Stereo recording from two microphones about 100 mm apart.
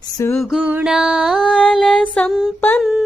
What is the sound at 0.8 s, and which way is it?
Music, 5° right (ahead or behind).